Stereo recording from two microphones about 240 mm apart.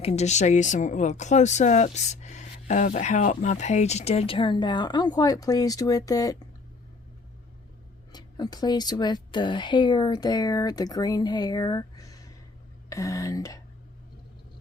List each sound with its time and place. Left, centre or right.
0.0 s speech: left
8.1 s speech: centre